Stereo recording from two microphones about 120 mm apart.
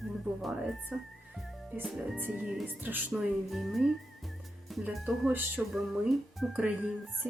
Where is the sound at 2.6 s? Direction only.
15° right (ahead or behind).